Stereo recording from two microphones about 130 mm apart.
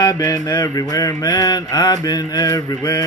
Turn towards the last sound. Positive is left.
turn(degrees=30)  # may be behind; listen again after turning